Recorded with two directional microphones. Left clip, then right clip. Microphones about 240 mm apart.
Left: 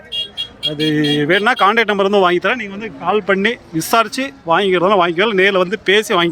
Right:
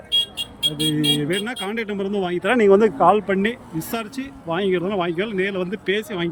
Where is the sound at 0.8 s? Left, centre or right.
Centre.